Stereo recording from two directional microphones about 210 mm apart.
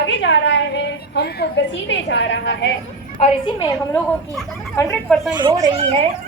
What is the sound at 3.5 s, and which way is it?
A woman's voice, 20° left (ahead or behind).